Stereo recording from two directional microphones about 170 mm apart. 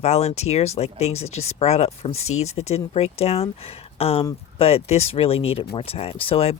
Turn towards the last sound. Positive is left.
turn(degrees=35)  # may be behind; listen again after turning